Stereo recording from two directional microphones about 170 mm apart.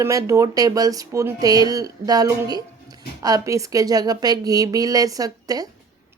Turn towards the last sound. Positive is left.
turn(degrees=-20)  # may be behind; listen again after turning